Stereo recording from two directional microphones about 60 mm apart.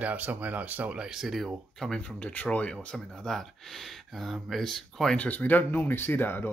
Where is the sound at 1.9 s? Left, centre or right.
Centre.